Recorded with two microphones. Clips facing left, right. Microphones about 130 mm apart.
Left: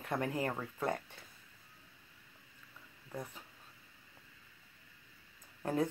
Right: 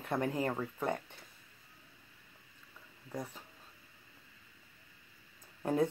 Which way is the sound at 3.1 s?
10° right (ahead or behind).